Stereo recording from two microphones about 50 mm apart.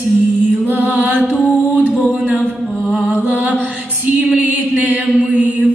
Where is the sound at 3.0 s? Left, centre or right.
Right.